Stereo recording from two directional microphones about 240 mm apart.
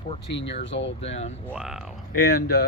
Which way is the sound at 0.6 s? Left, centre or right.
Left.